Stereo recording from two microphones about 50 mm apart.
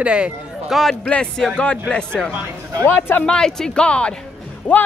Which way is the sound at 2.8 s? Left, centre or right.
Left.